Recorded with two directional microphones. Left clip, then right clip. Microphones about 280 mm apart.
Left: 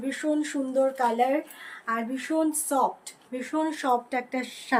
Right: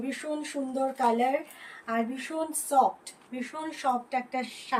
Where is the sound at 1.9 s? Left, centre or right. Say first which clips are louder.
Left 3 dB; centre.